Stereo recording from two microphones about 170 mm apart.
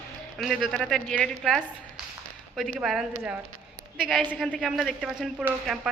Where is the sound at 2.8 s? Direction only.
Centre (ahead or behind).